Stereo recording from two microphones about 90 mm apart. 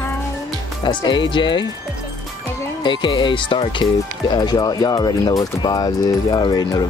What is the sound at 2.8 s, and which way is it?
Speech, 65° left (ahead or behind).